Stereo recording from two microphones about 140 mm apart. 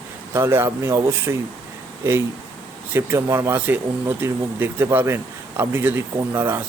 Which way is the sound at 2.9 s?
20° right (ahead or behind).